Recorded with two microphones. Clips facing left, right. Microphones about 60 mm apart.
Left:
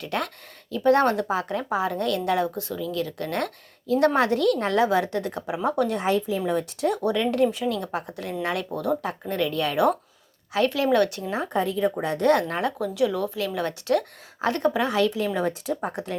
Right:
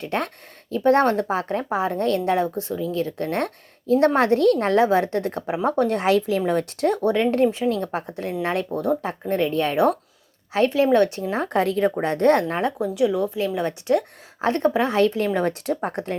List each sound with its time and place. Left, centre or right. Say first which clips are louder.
0.0 s speech: right 3 dB; right
6.0 s speech: right 4 dB; right
6.4 s speech: right 3 dB; right
11.4 s speech: right 4 dB; right
12.0 s speech: right 3 dB; right